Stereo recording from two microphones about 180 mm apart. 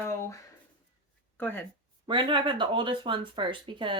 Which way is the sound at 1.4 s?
10° left (ahead or behind).